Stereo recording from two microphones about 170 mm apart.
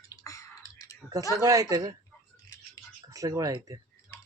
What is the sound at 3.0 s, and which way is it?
Speech, 20° right (ahead or behind).